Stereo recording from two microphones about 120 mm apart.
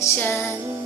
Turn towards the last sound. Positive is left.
turn(degrees=20)  # may be behind; listen again after turning